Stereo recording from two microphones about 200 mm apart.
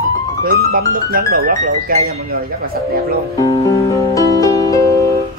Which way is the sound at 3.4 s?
15° left (ahead or behind).